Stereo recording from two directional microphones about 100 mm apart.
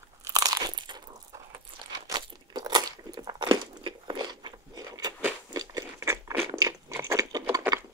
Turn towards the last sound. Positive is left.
turn(degrees=-35)  # may be behind; listen again after turning